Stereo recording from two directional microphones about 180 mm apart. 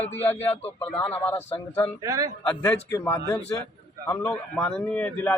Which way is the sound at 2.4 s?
10° left (ahead or behind).